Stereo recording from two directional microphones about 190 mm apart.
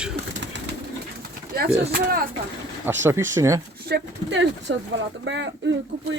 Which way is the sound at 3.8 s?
65° right (ahead or behind).